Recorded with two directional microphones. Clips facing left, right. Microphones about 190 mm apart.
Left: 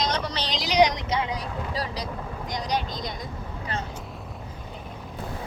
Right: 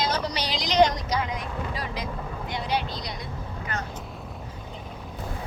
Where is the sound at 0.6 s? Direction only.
10° left (ahead or behind); by 3.2 s 45° left (ahead or behind).